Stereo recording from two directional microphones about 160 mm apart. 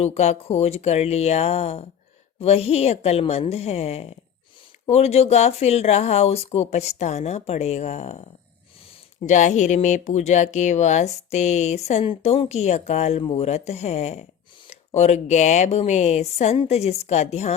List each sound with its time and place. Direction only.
0.0 s a woman's voice: 45° left (ahead or behind)